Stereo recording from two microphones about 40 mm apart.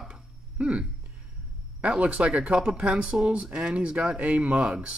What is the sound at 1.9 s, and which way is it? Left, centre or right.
A man's voice, right.